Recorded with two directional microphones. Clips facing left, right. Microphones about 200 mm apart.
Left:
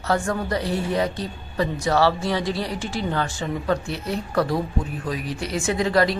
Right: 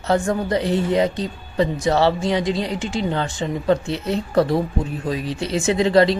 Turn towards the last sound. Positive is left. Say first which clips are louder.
# right 5 dB
turn(degrees=-25)  # may be behind; listen again after turning